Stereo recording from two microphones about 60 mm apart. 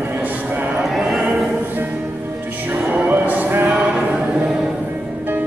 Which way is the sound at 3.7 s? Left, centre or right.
Centre.